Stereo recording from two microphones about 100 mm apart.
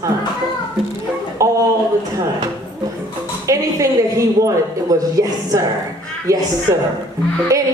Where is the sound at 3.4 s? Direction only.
35° right (ahead or behind).